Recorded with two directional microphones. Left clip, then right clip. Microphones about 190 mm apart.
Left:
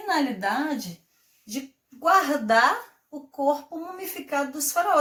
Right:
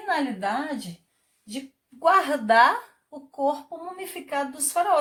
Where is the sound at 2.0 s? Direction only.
45° right (ahead or behind).